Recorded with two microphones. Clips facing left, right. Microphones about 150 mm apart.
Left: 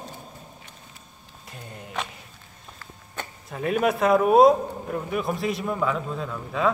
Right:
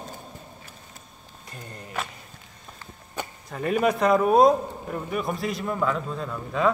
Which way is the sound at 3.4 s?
Centre (ahead or behind).